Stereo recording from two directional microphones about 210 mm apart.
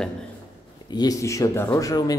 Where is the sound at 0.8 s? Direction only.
20° left (ahead or behind).